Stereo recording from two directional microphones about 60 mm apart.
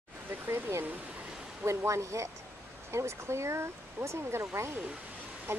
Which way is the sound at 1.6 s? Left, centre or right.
Right.